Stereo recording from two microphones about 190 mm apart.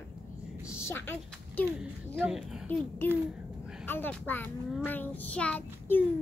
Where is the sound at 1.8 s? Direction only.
5° right (ahead or behind).